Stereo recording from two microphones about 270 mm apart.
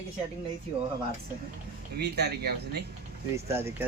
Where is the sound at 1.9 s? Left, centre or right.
Right.